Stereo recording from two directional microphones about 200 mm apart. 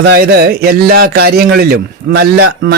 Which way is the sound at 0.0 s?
55° right (ahead or behind).